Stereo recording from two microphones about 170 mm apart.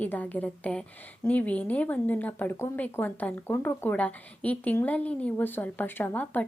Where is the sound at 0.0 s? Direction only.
10° left (ahead or behind).